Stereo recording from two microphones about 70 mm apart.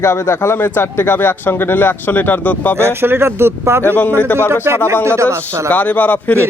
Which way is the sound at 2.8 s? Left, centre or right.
Right.